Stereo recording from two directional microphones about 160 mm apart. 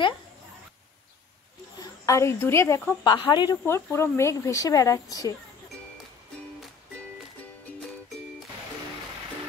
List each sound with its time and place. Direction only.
1.8 s a woman's voice: 20° left (ahead or behind)
3.1 s speech: 30° left (ahead or behind)
3.6 s speech: 15° left (ahead or behind)